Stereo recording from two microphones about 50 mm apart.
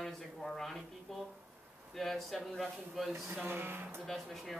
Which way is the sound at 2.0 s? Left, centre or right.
Centre.